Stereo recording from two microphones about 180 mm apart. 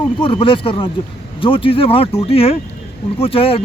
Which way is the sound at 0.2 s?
30° left (ahead or behind).